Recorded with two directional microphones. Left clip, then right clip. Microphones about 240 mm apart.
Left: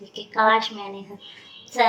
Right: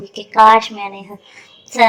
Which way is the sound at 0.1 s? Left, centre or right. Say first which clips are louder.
Right 10 dB; right.